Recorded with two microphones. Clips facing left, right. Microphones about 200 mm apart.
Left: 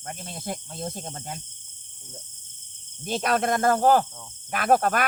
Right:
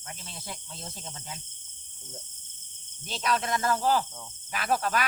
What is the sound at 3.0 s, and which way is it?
Speech, 50° left (ahead or behind).